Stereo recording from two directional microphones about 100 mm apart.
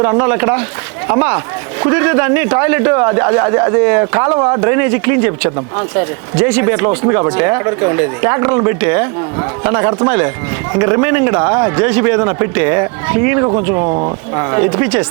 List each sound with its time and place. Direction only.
0.0 s a man's voice: 25° right (ahead or behind)